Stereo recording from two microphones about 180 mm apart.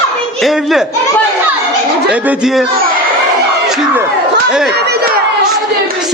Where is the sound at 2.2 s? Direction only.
5° right (ahead or behind).